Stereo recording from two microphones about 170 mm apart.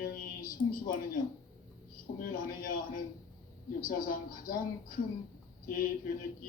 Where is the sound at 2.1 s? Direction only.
55° left (ahead or behind).